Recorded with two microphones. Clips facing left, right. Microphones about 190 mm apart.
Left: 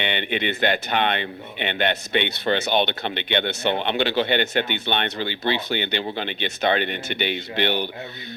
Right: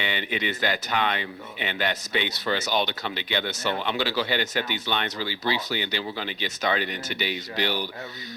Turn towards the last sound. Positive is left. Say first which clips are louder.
# left 4 dB
turn(degrees=60)  # may be behind; listen again after turning